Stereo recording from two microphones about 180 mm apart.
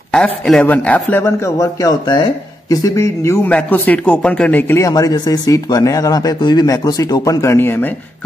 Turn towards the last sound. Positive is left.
turn(degrees=10)  # may be behind; listen again after turning